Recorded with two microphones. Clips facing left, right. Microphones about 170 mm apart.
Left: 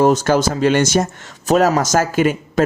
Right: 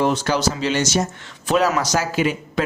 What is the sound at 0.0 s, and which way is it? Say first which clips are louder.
Speech: left 6 dB; 45° left (ahead or behind).